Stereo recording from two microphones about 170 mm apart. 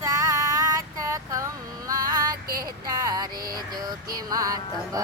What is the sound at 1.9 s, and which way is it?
Female singing, 20° right (ahead or behind).